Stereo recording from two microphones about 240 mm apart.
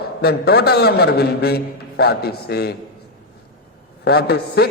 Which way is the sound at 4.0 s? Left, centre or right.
Left.